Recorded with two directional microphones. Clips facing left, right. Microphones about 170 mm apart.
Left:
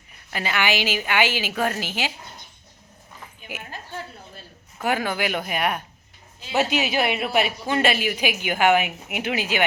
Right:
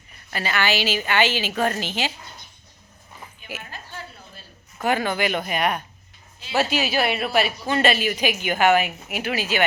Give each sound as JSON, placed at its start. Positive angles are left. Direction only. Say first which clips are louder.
{"t": 0.3, "sound": "speech", "louder": "even", "side_deg": 15}
{"t": 4.8, "sound": "speech", "louder": "right 2 dB", "side_deg": 10}
{"t": 6.5, "sound": "speech", "louder": "even", "side_deg": 20}